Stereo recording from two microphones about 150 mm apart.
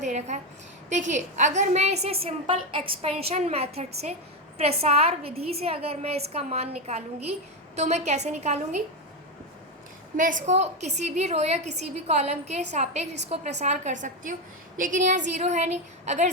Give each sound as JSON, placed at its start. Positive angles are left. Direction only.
{"t": 0.0, "sound": "a woman's voice", "side_deg": -50}
{"t": 10.2, "sound": "a woman's voice", "side_deg": -60}